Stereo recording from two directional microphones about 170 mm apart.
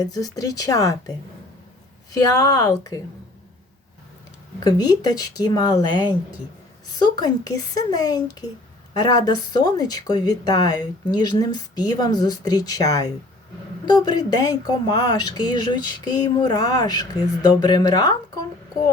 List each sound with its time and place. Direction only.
0.0 s speech: 20° left (ahead or behind)
2.1 s speech: 20° left (ahead or behind)
4.6 s a woman's voice: 25° left (ahead or behind)
14.1 s speech: 20° left (ahead or behind)